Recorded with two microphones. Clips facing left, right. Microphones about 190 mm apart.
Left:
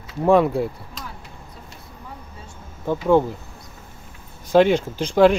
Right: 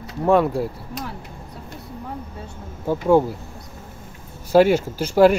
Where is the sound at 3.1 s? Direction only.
10° right (ahead or behind).